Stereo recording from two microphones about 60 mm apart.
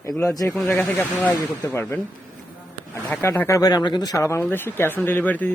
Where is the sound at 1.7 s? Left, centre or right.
Left.